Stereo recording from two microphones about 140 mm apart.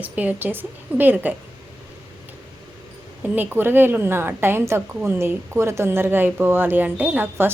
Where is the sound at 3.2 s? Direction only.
15° right (ahead or behind).